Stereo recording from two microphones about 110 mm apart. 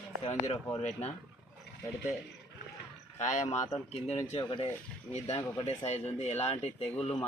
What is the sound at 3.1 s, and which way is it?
Speech, 90° left.